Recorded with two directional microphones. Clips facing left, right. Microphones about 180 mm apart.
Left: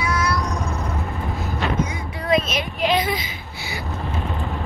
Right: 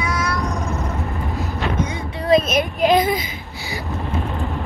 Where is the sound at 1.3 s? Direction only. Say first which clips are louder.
Even; 35° right (ahead or behind).